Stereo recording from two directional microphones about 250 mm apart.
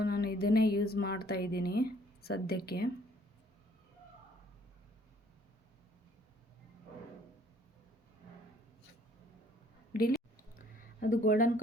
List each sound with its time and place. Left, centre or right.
0.0 s music: left
1.3 s speech: left
10.8 s speech: left